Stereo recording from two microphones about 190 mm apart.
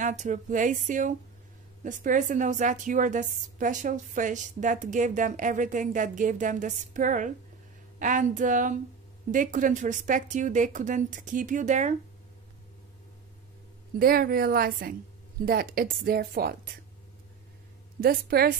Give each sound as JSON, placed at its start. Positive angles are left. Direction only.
{"t": 0.0, "sound": "a woman's voice", "side_deg": -40}
{"t": 13.9, "sound": "a woman's voice", "side_deg": -50}
{"t": 18.0, "sound": "a woman's voice", "side_deg": -55}